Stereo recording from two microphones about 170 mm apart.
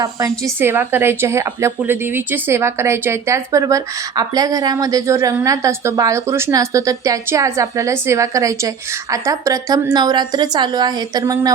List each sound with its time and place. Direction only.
0.0 s a woman's voice: 20° right (ahead or behind)